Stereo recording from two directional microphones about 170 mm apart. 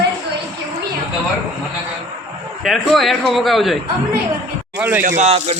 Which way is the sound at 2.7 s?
Centre (ahead or behind).